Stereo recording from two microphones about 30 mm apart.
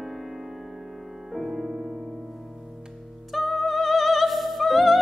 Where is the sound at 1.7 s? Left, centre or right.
Right.